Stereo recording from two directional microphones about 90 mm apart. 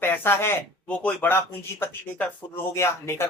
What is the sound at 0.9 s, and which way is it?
Speech, 15° left (ahead or behind).